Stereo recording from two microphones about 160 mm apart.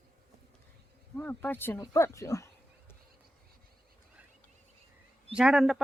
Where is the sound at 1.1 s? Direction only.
10° left (ahead or behind).